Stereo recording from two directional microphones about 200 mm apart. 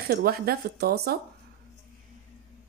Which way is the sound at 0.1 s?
50° right (ahead or behind).